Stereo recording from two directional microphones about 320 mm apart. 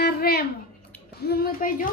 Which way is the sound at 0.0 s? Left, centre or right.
Left.